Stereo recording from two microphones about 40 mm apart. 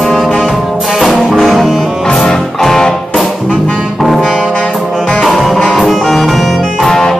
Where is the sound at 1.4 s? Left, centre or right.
Centre.